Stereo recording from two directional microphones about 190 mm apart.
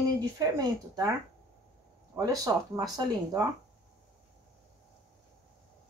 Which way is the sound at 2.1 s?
15° right (ahead or behind).